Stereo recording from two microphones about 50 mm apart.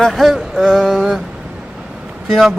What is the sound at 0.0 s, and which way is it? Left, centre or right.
Speech, centre.